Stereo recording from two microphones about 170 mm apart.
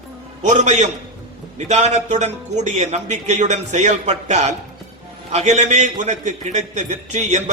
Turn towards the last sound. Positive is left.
turn(degrees=-45)  # may be behind; listen again after turning